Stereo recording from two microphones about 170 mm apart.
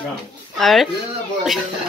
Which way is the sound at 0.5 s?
Centre (ahead or behind).